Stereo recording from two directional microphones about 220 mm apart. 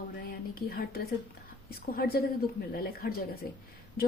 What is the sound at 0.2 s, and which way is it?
A woman's voice, 40° left (ahead or behind).